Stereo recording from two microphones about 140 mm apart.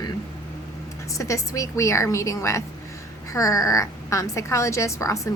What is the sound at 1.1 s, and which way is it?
A woman's voice, 25° left (ahead or behind).